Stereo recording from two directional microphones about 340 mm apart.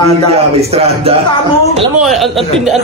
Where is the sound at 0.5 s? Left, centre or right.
Centre.